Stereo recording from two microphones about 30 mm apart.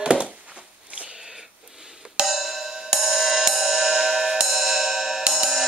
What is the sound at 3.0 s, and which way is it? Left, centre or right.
Music, centre.